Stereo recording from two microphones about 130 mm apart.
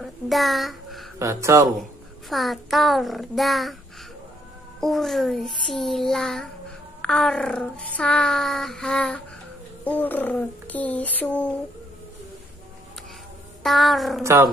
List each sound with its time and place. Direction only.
0.0 s a sound: centre (ahead or behind)
1.2 s speech: 20° right (ahead or behind)
1.8 s child singing: centre (ahead or behind)
4.7 s child singing: centre (ahead or behind)
9.8 s speech: 15° left (ahead or behind)
13.6 s child singing: centre (ahead or behind)
14.2 s speech: 20° right (ahead or behind)